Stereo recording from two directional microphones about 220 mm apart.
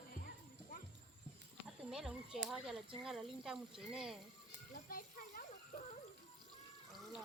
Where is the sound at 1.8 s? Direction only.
5° right (ahead or behind).